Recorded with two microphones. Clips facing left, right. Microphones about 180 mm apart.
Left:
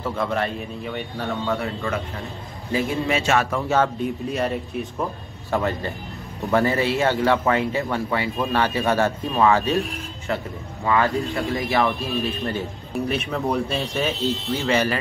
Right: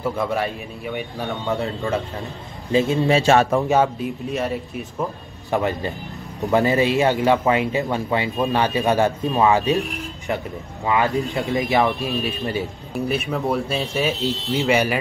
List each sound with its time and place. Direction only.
0.0 s speech: 10° right (ahead or behind)
1.5 s a man's voice: 25° right (ahead or behind)
3.6 s speech: 15° right (ahead or behind)
4.0 s speech: centre (ahead or behind)
5.5 s speech: 15° right (ahead or behind)
13.1 s speech: centre (ahead or behind)
14.5 s speech: 15° right (ahead or behind)